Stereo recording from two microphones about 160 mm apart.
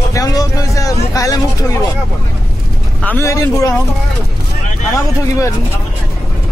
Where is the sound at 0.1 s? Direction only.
20° left (ahead or behind).